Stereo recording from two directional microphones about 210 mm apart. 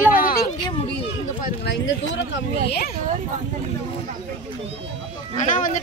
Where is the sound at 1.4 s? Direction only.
55° left (ahead or behind).